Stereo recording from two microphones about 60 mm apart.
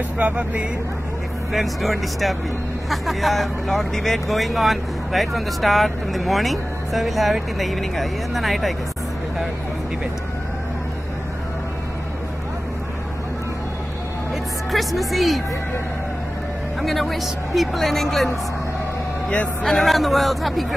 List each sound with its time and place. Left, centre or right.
0.2 s speech: right
1.5 s speech: centre
14.3 s speech: centre
16.8 s speech: centre
19.6 s speech: centre